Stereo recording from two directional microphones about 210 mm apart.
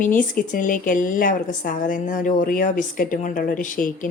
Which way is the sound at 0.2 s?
40° left (ahead or behind).